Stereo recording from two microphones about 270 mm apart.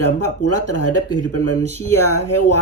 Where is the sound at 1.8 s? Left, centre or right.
Centre.